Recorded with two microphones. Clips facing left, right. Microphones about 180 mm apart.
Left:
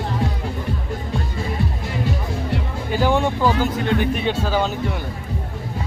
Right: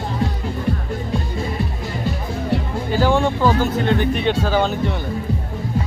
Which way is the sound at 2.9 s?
15° left (ahead or behind).